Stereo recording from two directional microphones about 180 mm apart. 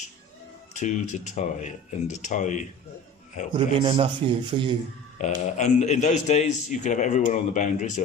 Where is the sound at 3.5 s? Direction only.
30° right (ahead or behind).